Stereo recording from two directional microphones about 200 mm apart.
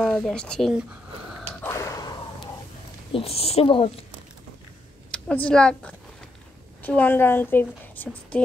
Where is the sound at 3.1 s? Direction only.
30° left (ahead or behind).